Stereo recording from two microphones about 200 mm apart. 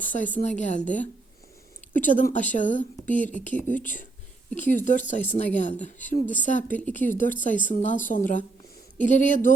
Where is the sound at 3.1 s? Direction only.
10° left (ahead or behind).